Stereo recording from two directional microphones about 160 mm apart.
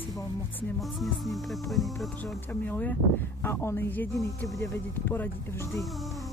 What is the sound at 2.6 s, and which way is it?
Speech, 10° left (ahead or behind).